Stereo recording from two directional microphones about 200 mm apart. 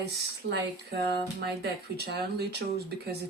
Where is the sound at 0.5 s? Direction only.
55° right (ahead or behind).